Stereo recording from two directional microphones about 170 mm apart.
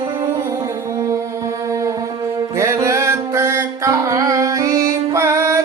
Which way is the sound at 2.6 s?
15° right (ahead or behind).